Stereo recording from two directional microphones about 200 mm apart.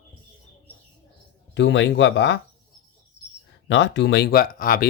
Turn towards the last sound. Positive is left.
turn(degrees=45)  # may be behind; listen again after turning